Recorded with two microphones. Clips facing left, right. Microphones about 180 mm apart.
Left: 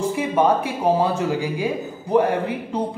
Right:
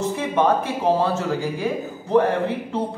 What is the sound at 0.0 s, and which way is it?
Speech, 10° left (ahead or behind).